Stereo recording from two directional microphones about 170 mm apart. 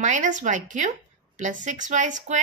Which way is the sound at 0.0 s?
45° right (ahead or behind).